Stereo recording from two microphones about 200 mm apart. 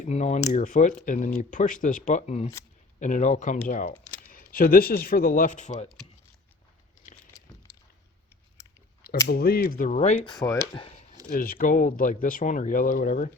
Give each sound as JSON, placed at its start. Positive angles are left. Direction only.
{"t": 0.0, "sound": "speech", "side_deg": 35}
{"t": 9.2, "sound": "speech", "side_deg": 50}
{"t": 10.4, "sound": "speech", "side_deg": 15}
{"t": 11.3, "sound": "speech", "side_deg": 45}